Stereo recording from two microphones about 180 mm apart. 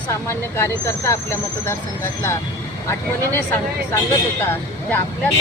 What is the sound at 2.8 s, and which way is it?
Speech, 10° left (ahead or behind).